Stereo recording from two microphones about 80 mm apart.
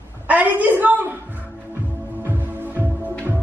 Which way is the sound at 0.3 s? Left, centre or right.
Right.